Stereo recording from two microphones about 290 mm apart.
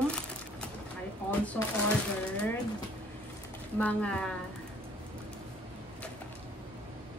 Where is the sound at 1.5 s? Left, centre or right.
Centre.